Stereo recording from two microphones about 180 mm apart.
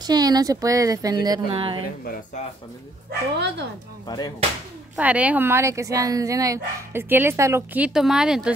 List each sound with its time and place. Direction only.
0.0 s speech: 20° right (ahead or behind)
3.1 s speech: 70° right (ahead or behind)
4.9 s speech: 5° right (ahead or behind)